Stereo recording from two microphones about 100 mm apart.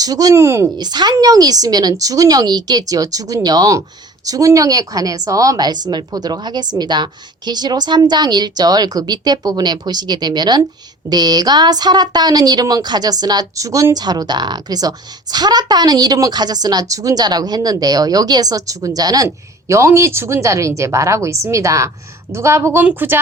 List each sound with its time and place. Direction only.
0.0 s a woman's voice: 40° right (ahead or behind)
0.8 s a woman's voice: 45° right (ahead or behind); by 23.1 s 20° right (ahead or behind)